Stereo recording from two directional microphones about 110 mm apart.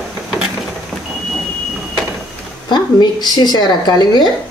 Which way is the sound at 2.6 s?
40° left (ahead or behind).